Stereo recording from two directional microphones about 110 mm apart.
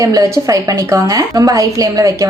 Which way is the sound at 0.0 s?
30° right (ahead or behind).